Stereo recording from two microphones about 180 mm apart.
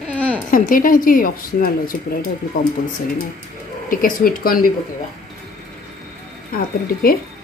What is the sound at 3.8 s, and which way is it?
Speech, 50° left (ahead or behind).